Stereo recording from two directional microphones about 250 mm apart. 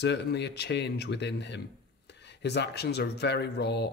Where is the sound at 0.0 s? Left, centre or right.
Left.